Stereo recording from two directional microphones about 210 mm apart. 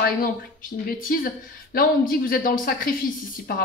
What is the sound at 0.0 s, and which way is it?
Speech, 45° left (ahead or behind).